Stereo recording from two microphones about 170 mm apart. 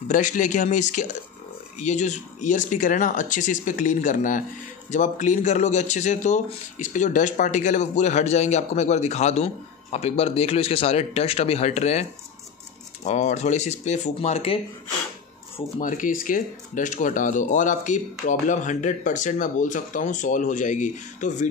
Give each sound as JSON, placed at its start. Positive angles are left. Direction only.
{"t": 0.1, "sound": "speech", "side_deg": 50}
{"t": 15.8, "sound": "speech", "side_deg": 50}